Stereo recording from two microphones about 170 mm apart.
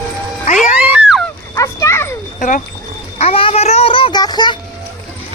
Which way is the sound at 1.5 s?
20° left (ahead or behind).